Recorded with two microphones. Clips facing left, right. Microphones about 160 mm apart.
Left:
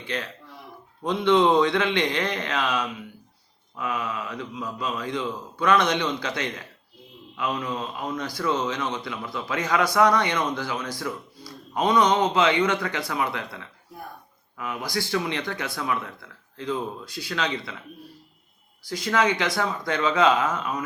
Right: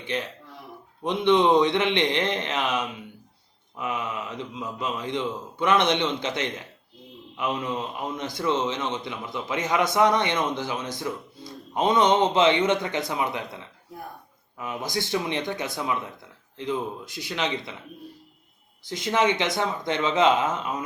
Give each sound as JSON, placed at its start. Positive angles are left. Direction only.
{"t": 0.0, "sound": "a man's voice", "side_deg": -20}
{"t": 18.9, "sound": "a man's voice", "side_deg": -20}